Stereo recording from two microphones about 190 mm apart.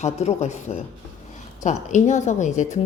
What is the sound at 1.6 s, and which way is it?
A woman's voice, 40° left (ahead or behind).